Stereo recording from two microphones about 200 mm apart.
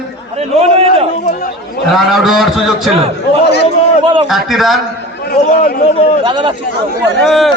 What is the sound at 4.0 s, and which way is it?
Speech, 25° right (ahead or behind).